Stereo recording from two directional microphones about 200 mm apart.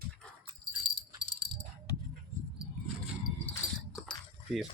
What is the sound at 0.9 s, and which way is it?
Jingle bell, 20° right (ahead or behind).